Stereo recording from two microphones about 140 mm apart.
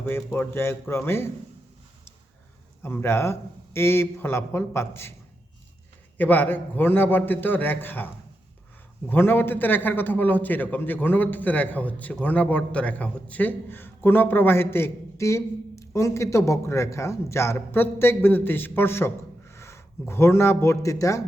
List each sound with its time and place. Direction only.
0.3 s a man's voice: 15° left (ahead or behind)
2.8 s a man's voice: 15° left (ahead or behind)
6.1 s a man's voice: 15° left (ahead or behind)